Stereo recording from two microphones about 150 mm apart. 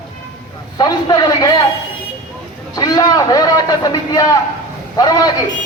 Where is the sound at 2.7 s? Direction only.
25° left (ahead or behind).